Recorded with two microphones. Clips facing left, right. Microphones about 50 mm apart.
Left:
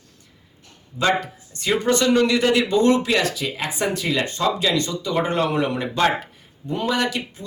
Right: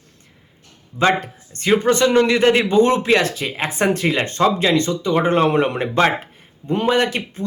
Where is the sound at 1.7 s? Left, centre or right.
Right.